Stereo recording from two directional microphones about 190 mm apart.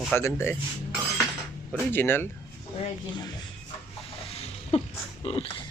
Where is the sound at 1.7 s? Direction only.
10° left (ahead or behind).